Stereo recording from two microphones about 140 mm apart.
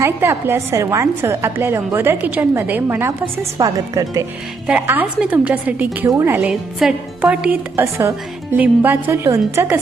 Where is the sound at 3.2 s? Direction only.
30° right (ahead or behind).